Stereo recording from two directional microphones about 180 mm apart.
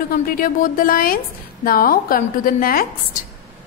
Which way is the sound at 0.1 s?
50° left (ahead or behind).